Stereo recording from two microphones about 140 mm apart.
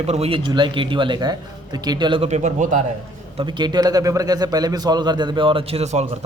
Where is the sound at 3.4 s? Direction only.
30° right (ahead or behind); by 6.0 s 45° right (ahead or behind).